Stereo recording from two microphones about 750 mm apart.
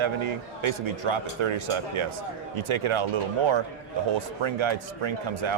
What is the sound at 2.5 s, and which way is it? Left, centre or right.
Speech, right.